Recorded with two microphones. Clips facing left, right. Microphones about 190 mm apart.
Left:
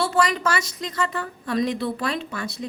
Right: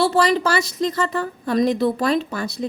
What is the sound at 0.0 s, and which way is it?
A woman's voice, 35° right (ahead or behind).